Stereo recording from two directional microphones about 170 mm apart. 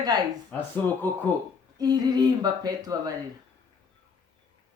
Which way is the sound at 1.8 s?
25° right (ahead or behind).